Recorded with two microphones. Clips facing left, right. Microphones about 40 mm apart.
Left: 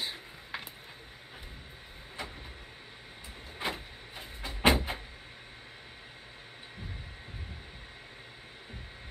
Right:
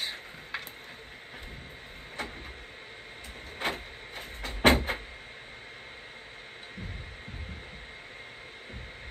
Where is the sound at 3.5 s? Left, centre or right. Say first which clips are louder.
Right 3 dB; right.